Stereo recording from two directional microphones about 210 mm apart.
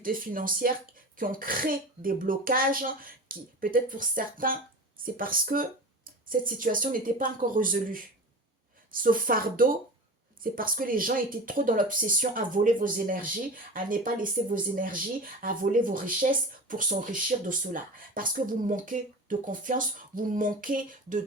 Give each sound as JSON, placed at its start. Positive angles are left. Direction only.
{"t": 0.0, "sound": "speech", "side_deg": -40}